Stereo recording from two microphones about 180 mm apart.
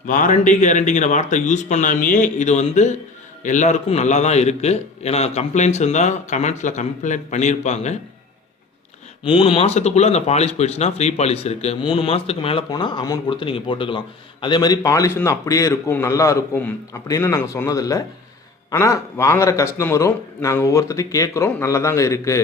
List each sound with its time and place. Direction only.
0.1 s speech: 45° left (ahead or behind)
9.2 s a man's voice: 30° left (ahead or behind)